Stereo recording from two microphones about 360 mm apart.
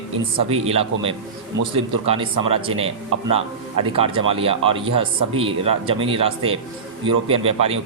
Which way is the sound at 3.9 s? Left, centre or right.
Centre.